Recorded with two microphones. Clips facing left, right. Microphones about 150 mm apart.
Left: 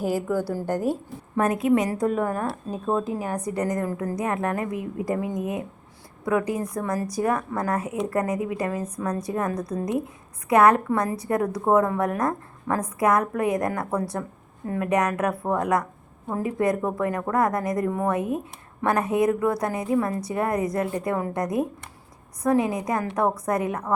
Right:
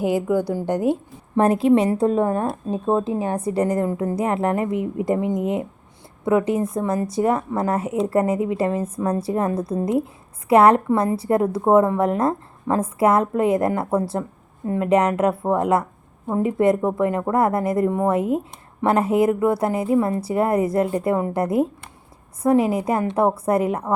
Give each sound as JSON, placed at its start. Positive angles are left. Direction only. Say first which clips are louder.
{"t": 0.3, "sound": "a woman's voice", "louder": "right 4 dB", "side_deg": -20}